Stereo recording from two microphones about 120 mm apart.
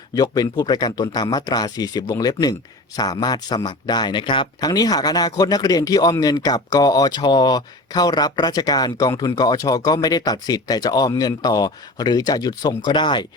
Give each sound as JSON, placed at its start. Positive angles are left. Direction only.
{"t": 0.1, "sound": "speech", "side_deg": 35}